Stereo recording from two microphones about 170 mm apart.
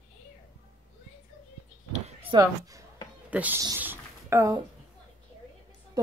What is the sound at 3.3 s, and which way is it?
Speech, 10° right (ahead or behind).